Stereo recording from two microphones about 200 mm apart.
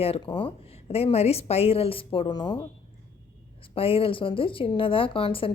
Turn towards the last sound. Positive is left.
turn(degrees=25)  # may be behind; listen again after turning